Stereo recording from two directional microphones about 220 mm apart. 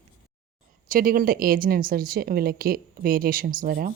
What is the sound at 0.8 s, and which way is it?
A woman's voice, 40° right (ahead or behind).